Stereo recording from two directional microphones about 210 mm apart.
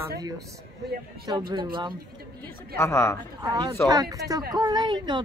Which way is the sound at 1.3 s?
20° right (ahead or behind).